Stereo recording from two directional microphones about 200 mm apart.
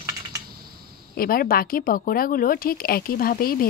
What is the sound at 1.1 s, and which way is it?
A woman's voice, 45° left (ahead or behind).